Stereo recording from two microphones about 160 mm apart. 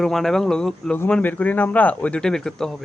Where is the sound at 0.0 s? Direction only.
5° left (ahead or behind).